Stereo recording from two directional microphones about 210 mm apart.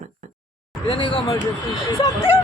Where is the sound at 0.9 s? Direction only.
25° left (ahead or behind).